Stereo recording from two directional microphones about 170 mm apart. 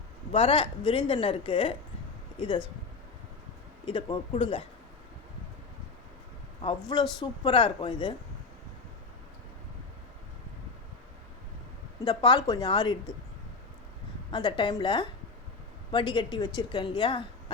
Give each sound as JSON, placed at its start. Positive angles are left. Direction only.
{"t": 0.3, "sound": "a woman's voice", "side_deg": 35}
{"t": 3.8, "sound": "speech", "side_deg": 25}
{"t": 6.6, "sound": "speech", "side_deg": 30}
{"t": 12.0, "sound": "speech", "side_deg": 25}
{"t": 14.3, "sound": "speech", "side_deg": 30}